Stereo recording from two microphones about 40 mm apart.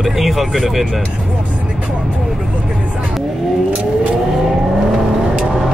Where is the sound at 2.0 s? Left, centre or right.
Centre.